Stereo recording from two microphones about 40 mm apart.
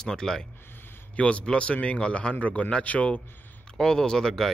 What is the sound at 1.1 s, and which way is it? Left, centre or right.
A man's voice, left.